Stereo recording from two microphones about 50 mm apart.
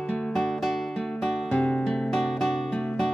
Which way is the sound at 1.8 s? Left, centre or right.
Centre.